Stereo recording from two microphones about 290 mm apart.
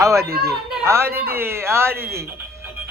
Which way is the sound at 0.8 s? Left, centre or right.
Centre.